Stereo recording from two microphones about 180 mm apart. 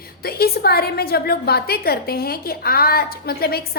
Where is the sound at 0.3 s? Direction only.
60° left (ahead or behind).